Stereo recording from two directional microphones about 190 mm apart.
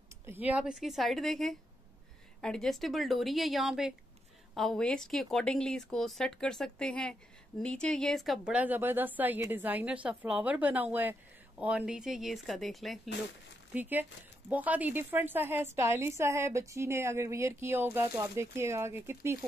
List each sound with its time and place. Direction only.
0.3 s a woman's voice: 10° right (ahead or behind)